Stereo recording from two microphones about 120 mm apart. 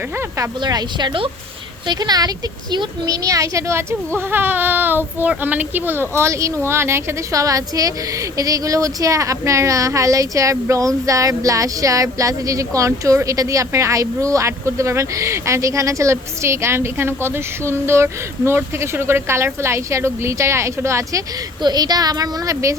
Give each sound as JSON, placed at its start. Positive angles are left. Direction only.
{"t": 0.6, "sound": "a woman's voice", "side_deg": -35}